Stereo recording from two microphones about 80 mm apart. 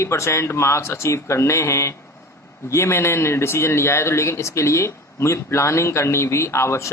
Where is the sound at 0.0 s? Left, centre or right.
Left.